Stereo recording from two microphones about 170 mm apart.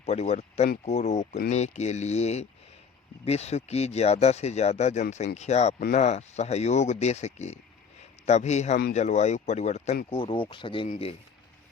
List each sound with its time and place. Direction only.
0.0 s speech: 40° left (ahead or behind)
10.8 s speech: 45° left (ahead or behind)